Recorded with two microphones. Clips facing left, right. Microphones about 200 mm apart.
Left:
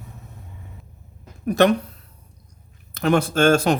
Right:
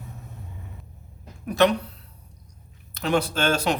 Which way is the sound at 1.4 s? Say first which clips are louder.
Left 3 dB; 50° left (ahead or behind).